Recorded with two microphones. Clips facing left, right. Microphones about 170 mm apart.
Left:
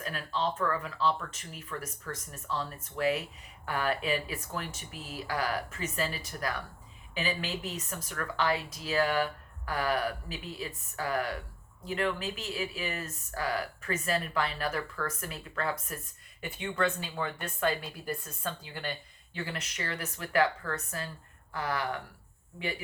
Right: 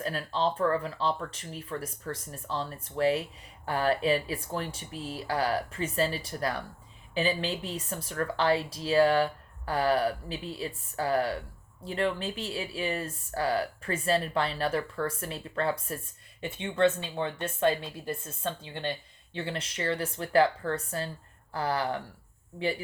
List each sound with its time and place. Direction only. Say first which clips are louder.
0.0 s speech: right 4 dB; 35° right (ahead or behind)